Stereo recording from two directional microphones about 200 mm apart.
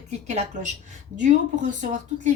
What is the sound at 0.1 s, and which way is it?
A woman's voice, 35° right (ahead or behind).